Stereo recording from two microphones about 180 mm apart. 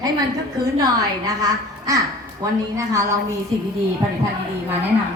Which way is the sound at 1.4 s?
20° right (ahead or behind).